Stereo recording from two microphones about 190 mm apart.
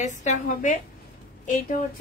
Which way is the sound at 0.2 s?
40° left (ahead or behind).